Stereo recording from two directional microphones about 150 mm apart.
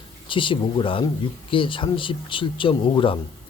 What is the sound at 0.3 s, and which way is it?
Speech, 35° left (ahead or behind).